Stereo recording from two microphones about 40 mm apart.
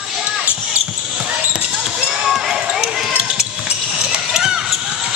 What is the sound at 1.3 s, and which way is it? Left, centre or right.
Basketball bounce, right.